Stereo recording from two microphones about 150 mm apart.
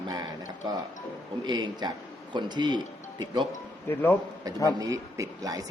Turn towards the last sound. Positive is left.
turn(degrees=-25)  # may be behind; listen again after turning